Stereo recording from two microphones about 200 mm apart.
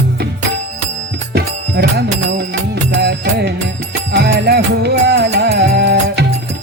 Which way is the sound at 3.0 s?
55° right (ahead or behind).